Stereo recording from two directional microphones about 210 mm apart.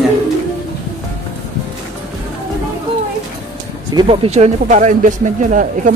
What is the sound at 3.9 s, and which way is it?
Speech, 20° right (ahead or behind).